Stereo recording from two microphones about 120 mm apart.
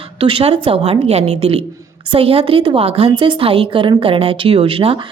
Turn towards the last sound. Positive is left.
turn(degrees=-50)  # may be behind; listen again after turning